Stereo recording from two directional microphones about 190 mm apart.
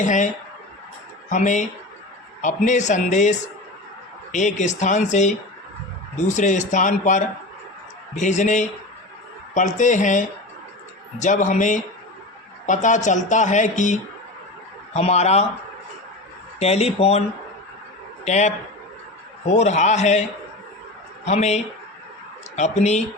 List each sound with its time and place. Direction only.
0.0 s speech: 40° left (ahead or behind)
1.3 s speech: 40° left (ahead or behind)
16.6 s speech: 35° left (ahead or behind)
18.3 s speech: 35° left (ahead or behind)
21.2 s speech: 35° left (ahead or behind)